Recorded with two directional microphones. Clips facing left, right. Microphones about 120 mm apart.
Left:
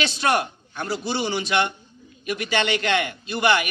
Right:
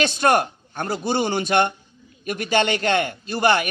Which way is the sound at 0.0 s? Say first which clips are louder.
Right 4 dB; 50° right (ahead or behind).